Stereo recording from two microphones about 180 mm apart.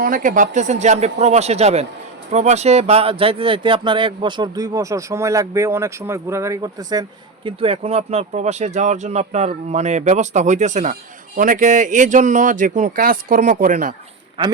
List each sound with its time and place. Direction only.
0.0 s speech: 50° right (ahead or behind); by 7.0 s 20° right (ahead or behind)
7.4 s speech: 30° right (ahead or behind); by 13.9 s 45° right (ahead or behind)
14.4 s speech: 30° right (ahead or behind)